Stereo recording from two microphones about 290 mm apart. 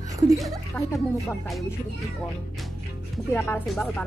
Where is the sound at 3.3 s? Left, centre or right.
Centre.